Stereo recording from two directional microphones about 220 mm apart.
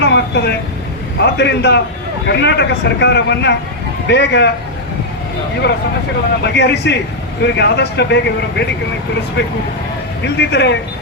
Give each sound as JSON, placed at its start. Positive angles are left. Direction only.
{"t": 0.0, "sound": "vehicle", "side_deg": 50}
{"t": 1.2, "sound": "a man's voice", "side_deg": 50}
{"t": 6.4, "sound": "a man's voice", "side_deg": 50}
{"t": 10.2, "sound": "a man's voice", "side_deg": 50}